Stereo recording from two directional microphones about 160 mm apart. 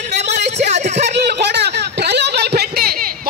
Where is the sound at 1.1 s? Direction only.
90° right; by 3.3 s 75° right (ahead or behind).